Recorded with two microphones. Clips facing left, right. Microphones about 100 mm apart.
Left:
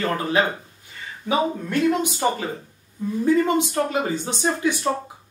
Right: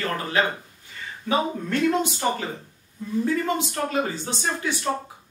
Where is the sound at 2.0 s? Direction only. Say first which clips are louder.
Left 2 dB; 15° left (ahead or behind).